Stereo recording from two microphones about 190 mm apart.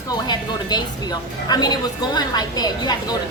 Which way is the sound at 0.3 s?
20° left (ahead or behind).